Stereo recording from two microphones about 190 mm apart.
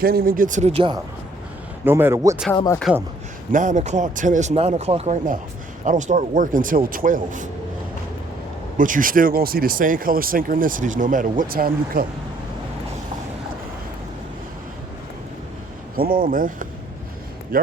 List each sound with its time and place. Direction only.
0.0 s speech: 50° right (ahead or behind); by 0.9 s 30° right (ahead or behind)
1.8 s speech: 10° right (ahead or behind)
2.9 s speech: 5° right (ahead or behind)
3.5 s speech: 40° right (ahead or behind)
8.8 s speech: 45° right (ahead or behind)
16.2 s speech: 45° right (ahead or behind)